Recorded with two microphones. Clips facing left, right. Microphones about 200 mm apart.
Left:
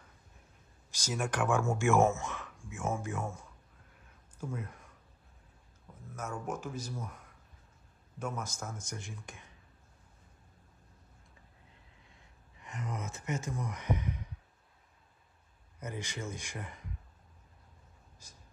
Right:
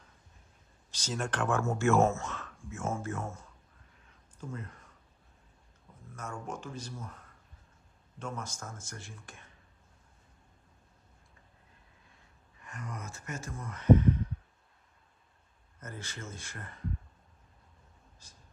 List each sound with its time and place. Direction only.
0.9 s speech: 10° left (ahead or behind)
6.1 s speech: 5° left (ahead or behind)
8.5 s speech: 5° left (ahead or behind)
8.8 s speech: 15° left (ahead or behind)
12.5 s speech: 20° left (ahead or behind)
15.8 s speech: 15° left (ahead or behind)